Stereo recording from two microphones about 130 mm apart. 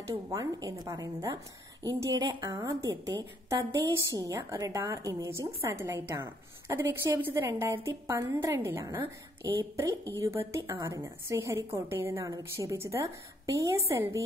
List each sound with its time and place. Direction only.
0.1 s a woman's voice: 25° right (ahead or behind)